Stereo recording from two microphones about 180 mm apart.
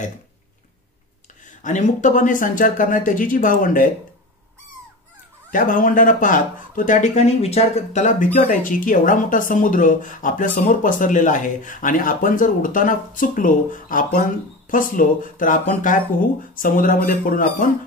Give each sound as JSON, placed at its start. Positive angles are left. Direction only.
{"t": 1.6, "sound": "speech", "side_deg": 45}
{"t": 5.5, "sound": "speech", "side_deg": 50}